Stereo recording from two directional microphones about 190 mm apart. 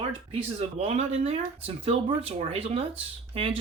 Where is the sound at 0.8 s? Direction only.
35° right (ahead or behind).